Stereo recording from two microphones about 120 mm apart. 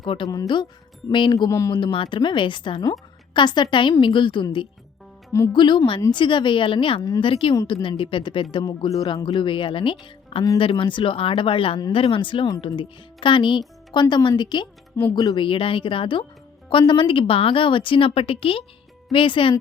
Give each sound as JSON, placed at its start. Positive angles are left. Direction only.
{"t": 0.0, "sound": "a woman's voice", "side_deg": 45}
{"t": 0.3, "sound": "a woman's voice", "side_deg": 35}
{"t": 1.5, "sound": "speech", "side_deg": 25}
{"t": 1.7, "sound": "speech", "side_deg": 45}
{"t": 5.5, "sound": "a woman's voice", "side_deg": 40}
{"t": 8.6, "sound": "speech", "side_deg": 30}
{"t": 9.4, "sound": "a woman's voice", "side_deg": 45}
{"t": 15.4, "sound": "a woman's voice", "side_deg": 45}